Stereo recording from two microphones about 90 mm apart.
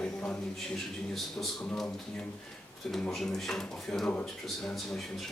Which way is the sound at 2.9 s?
5° left (ahead or behind).